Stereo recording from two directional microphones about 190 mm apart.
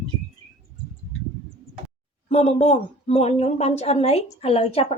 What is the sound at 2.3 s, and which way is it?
A woman's voice, 35° left (ahead or behind).